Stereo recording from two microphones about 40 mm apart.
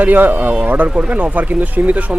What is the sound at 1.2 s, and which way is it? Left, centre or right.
Speech, right.